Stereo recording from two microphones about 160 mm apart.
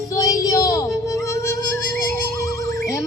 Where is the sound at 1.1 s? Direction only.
20° left (ahead or behind).